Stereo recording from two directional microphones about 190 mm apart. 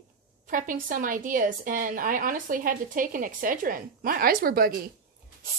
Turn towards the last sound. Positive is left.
turn(degrees=-50)  # may be behind; listen again after turning